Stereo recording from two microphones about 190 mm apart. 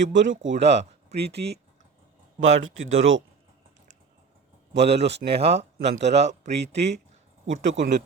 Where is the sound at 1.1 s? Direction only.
60° right (ahead or behind).